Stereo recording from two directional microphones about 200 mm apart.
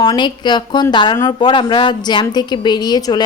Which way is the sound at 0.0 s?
20° left (ahead or behind).